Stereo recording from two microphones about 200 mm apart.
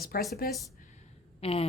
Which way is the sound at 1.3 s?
30° left (ahead or behind).